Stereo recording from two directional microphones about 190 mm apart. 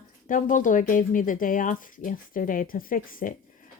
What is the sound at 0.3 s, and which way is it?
A woman's voice, 45° left (ahead or behind).